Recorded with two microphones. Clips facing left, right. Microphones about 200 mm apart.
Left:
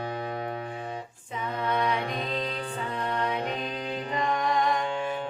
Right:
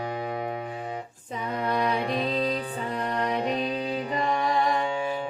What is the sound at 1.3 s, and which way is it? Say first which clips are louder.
Music: right 1 dB; 35° right (ahead or behind).